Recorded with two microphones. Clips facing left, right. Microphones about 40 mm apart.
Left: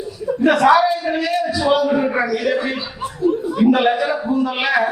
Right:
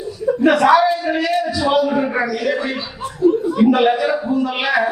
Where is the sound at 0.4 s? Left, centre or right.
Centre.